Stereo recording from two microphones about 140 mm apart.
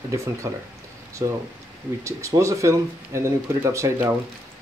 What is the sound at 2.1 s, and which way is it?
Speech, 20° right (ahead or behind).